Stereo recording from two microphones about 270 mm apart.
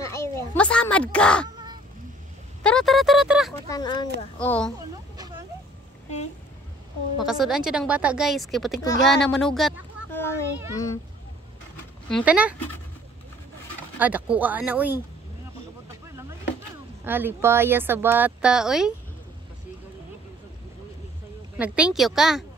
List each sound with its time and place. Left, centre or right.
0.0 s a sound: centre
2.6 s speech: centre
3.7 s speech: centre
4.4 s speech: centre
7.2 s speech: centre
12.1 s speech: centre
13.9 s speech: centre
17.0 s speech: centre
21.5 s speech: centre